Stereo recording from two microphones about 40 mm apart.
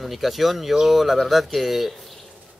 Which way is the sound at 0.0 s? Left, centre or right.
Centre.